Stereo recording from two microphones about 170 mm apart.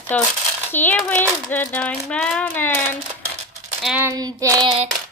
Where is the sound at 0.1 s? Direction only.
10° left (ahead or behind).